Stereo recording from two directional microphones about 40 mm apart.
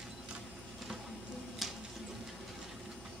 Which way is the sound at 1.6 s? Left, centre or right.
Centre.